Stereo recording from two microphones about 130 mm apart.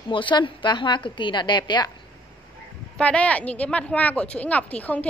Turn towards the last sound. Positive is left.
turn(degrees=10)  # may be behind; listen again after turning